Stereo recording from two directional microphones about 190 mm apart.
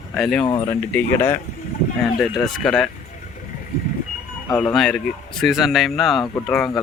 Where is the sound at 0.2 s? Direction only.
Centre (ahead or behind).